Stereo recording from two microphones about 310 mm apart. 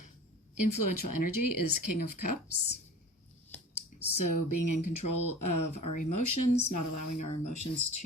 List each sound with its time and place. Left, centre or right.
0.5 s speech: left
4.2 s speech: left